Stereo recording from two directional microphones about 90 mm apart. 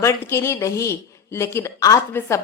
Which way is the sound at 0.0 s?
30° left (ahead or behind).